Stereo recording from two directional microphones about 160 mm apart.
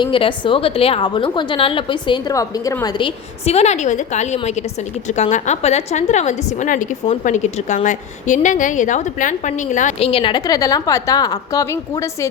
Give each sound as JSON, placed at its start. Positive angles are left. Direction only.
{"t": 0.0, "sound": "a woman's voice", "side_deg": 30}
{"t": 3.4, "sound": "a woman's voice", "side_deg": 40}
{"t": 10.1, "sound": "a woman's voice", "side_deg": 30}